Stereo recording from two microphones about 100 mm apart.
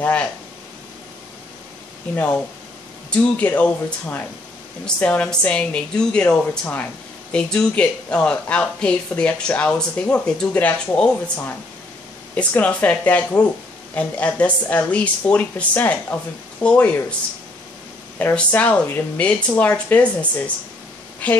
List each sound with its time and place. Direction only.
0.0 s speech: 15° left (ahead or behind)
3.1 s speech: 15° left (ahead or behind)
18.3 s a woman's voice: 15° left (ahead or behind)